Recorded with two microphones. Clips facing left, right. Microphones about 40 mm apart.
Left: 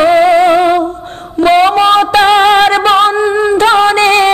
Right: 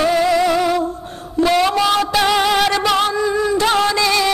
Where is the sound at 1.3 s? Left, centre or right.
Left.